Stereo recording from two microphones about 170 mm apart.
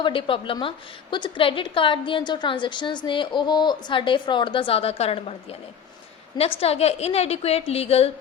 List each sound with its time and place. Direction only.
0.0 s a woman's voice: 30° left (ahead or behind)